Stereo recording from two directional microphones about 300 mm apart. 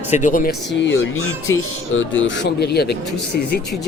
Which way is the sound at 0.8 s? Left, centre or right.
Left.